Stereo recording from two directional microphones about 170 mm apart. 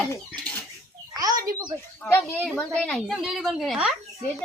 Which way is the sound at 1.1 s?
20° right (ahead or behind).